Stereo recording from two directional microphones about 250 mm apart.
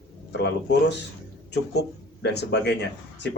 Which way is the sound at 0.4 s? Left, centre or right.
Left.